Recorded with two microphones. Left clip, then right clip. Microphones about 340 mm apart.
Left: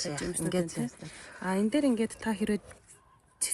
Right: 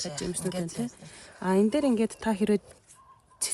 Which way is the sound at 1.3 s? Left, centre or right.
Right.